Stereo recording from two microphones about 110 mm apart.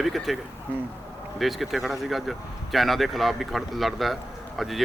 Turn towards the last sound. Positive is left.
turn(degrees=0)  # may be behind; listen again after turning